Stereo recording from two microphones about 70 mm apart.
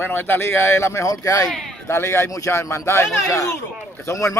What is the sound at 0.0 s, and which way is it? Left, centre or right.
Speech, left.